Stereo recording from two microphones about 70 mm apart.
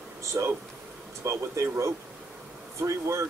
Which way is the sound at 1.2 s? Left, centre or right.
Right.